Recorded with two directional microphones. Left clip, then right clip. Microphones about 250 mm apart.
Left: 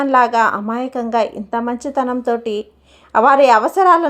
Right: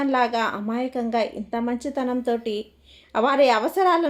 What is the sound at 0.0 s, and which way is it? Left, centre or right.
A woman's voice, centre.